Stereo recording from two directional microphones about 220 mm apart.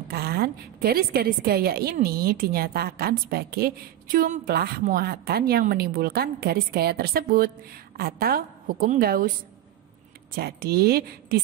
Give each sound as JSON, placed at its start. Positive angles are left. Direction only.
{"t": 0.1, "sound": "a woman's voice", "side_deg": -45}
{"t": 10.3, "sound": "a woman's voice", "side_deg": -45}